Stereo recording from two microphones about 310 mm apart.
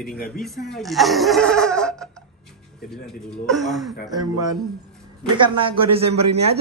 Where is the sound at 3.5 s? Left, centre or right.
Centre.